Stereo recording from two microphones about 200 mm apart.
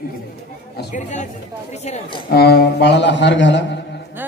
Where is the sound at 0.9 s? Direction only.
35° left (ahead or behind).